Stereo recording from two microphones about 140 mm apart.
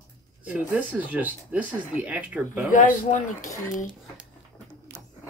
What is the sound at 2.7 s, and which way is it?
Speech, 65° left (ahead or behind).